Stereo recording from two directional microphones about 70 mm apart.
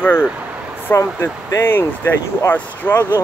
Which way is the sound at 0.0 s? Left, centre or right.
Left.